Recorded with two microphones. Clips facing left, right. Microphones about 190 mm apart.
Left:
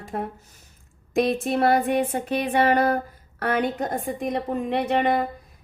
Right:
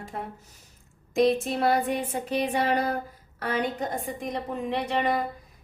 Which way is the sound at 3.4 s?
60° left (ahead or behind).